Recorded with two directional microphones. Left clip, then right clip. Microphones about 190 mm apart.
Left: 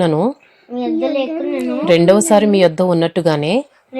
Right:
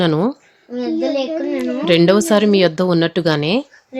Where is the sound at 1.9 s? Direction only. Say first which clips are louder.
Left 2 dB; 10° right (ahead or behind).